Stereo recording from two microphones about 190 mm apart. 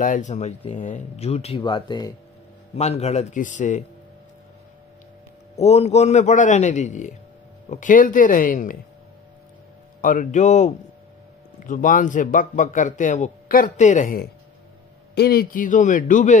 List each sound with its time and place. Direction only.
0.0 s speech: 40° left (ahead or behind); by 2.1 s 25° left (ahead or behind)
2.7 s speech: 35° left (ahead or behind)
5.6 s speech: 35° left (ahead or behind)
10.0 s speech: 40° left (ahead or behind)